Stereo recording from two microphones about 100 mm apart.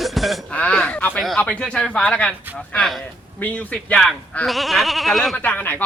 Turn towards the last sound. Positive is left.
turn(degrees=20)  # may be behind; listen again after turning